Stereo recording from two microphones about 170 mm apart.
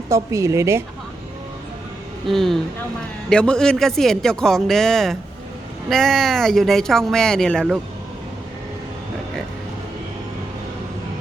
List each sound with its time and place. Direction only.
0.1 s a woman's voice: 20° right (ahead or behind)
2.2 s a man's voice: centre (ahead or behind)